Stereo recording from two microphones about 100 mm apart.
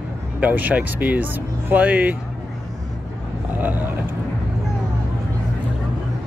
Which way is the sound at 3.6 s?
20° right (ahead or behind).